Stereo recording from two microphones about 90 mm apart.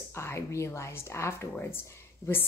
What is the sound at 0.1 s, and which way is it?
Speech, 30° left (ahead or behind).